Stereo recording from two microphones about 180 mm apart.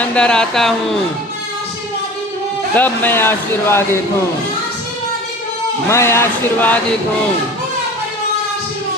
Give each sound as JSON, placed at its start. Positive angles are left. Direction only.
{"t": 0.0, "sound": "speech", "side_deg": 5}
{"t": 2.7, "sound": "speech", "side_deg": 10}
{"t": 5.9, "sound": "speech", "side_deg": 15}